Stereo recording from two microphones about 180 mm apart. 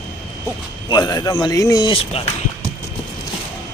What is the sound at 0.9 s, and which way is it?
Speech, 25° left (ahead or behind).